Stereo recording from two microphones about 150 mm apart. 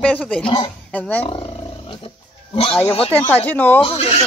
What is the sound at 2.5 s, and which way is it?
Speech, 35° left (ahead or behind).